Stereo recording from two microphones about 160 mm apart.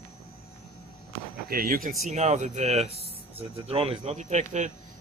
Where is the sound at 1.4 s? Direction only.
65° right (ahead or behind).